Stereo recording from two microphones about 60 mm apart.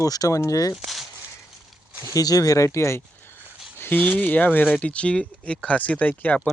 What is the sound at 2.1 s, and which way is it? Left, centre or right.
Speech, left.